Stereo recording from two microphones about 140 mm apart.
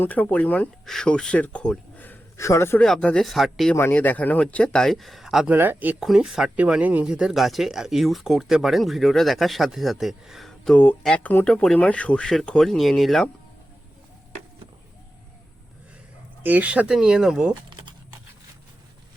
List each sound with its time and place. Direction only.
0.0 s speech: 10° left (ahead or behind)
2.8 s speech: 5° left (ahead or behind)
3.8 s speech: 15° left (ahead or behind); by 5.5 s 5° right (ahead or behind)
5.5 s speech: 15° right (ahead or behind)
16.4 s speech: 10° right (ahead or behind)